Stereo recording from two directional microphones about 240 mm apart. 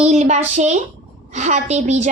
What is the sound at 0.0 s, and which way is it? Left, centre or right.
A woman's voice, right.